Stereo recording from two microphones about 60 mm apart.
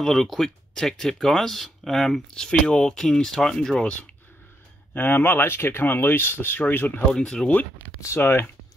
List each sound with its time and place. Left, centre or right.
0.0 s speech: centre
4.9 s speech: left
7.1 s speech: centre
8.2 s speech: left